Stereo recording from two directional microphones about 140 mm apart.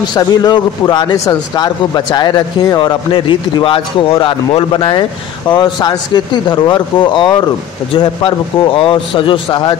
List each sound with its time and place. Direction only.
0.1 s speech: 30° left (ahead or behind)